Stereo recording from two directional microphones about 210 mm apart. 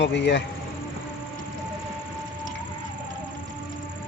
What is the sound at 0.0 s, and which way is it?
Speech, 55° left (ahead or behind).